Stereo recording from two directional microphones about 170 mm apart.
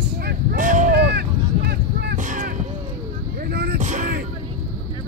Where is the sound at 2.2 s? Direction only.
50° right (ahead or behind).